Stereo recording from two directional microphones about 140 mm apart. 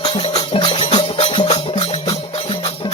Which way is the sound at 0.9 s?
35° left (ahead or behind).